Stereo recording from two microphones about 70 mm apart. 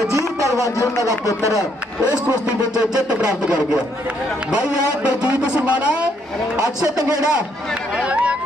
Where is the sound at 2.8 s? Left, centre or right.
Centre.